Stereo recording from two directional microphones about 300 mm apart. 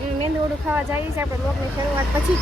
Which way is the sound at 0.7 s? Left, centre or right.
Centre.